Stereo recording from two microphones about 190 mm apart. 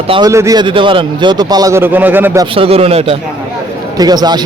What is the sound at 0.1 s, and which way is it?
Speech, 20° right (ahead or behind).